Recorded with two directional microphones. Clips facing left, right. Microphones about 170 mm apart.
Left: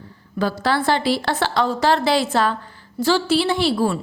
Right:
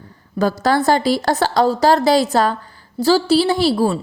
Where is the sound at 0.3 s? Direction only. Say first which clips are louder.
Right 4 dB; 40° right (ahead or behind).